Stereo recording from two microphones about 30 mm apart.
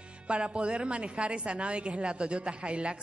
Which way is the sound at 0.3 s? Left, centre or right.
Right.